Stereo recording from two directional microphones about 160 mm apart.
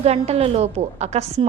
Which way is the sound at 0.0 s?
40° right (ahead or behind).